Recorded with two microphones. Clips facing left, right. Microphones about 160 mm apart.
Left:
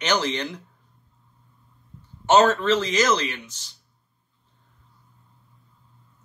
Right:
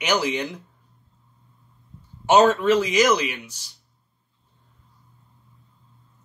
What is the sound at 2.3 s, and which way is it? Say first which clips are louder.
Speech: right 1 dB; 15° right (ahead or behind).